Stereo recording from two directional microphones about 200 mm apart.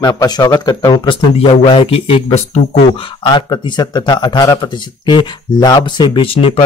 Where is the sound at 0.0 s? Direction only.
20° left (ahead or behind).